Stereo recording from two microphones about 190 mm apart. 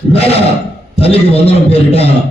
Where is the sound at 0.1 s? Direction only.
30° left (ahead or behind).